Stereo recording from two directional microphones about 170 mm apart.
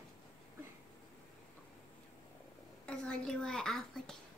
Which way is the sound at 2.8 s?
5° left (ahead or behind).